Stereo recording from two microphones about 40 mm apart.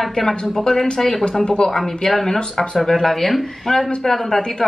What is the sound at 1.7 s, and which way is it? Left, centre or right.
A woman's voice, centre.